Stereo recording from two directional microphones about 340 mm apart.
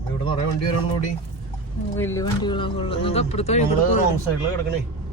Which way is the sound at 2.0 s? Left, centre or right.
Centre.